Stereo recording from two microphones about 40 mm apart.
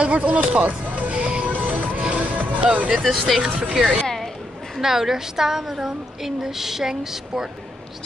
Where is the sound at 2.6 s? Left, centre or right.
Right.